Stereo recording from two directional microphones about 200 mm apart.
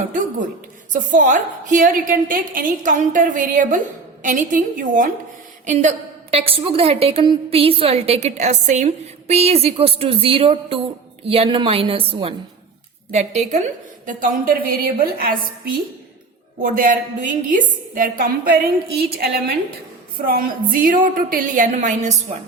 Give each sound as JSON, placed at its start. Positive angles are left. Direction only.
{"t": 0.1, "sound": "a sound", "side_deg": -40}
{"t": 0.9, "sound": "a woman's voice", "side_deg": -40}
{"t": 13.5, "sound": "a woman's voice", "side_deg": -40}
{"t": 16.6, "sound": "a woman's voice", "side_deg": -45}